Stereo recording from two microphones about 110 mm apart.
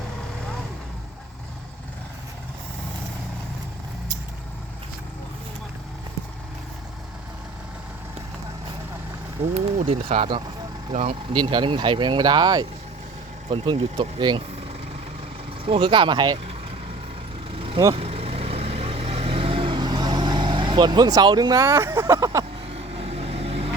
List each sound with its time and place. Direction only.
9.6 s speech: 70° right (ahead or behind)
11.3 s speech: 45° right (ahead or behind)
13.5 s speech: 60° right (ahead or behind)
14.2 s speech: 45° right (ahead or behind)
15.6 s speech: 50° right (ahead or behind)
17.5 s vehicle: 60° right (ahead or behind); by 22.4 s 30° right (ahead or behind)
22.7 s vehicle: 65° right (ahead or behind)